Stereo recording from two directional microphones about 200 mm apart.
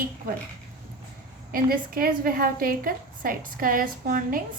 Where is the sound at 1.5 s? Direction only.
45° right (ahead or behind).